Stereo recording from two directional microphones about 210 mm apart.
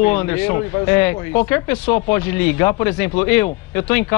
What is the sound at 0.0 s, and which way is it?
Speech, 10° left (ahead or behind).